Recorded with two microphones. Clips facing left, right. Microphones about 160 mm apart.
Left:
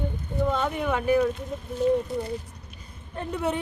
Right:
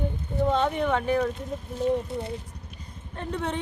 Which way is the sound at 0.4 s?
30° right (ahead or behind).